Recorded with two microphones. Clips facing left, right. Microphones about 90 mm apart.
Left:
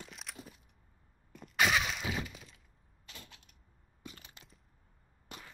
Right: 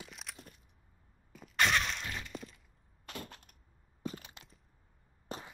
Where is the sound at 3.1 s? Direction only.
50° right (ahead or behind).